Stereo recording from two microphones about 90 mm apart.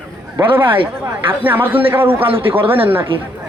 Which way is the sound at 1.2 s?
20° right (ahead or behind).